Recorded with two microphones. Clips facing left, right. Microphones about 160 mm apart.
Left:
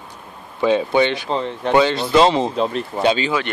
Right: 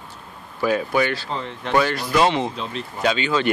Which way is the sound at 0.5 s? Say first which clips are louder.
Left 4 dB; 25° left (ahead or behind).